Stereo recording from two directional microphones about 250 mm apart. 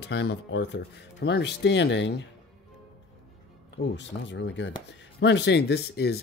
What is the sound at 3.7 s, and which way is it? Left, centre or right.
Speech, left.